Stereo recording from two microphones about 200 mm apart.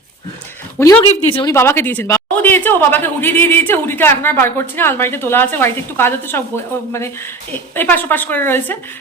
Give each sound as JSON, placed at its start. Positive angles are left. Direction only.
{"t": 0.8, "sound": "speech", "side_deg": 15}
{"t": 1.0, "sound": "speech", "side_deg": 25}
{"t": 1.5, "sound": "speech", "side_deg": 10}